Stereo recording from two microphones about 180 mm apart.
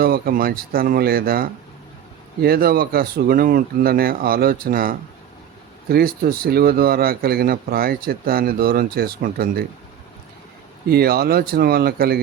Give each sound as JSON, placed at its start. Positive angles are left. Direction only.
{"t": 0.0, "sound": "speech", "side_deg": -55}
{"t": 10.8, "sound": "speech", "side_deg": -60}